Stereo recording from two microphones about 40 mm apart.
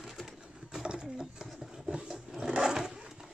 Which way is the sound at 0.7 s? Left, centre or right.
Right.